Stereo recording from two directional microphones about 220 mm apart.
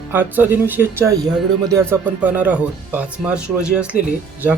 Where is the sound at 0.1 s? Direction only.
10° right (ahead or behind).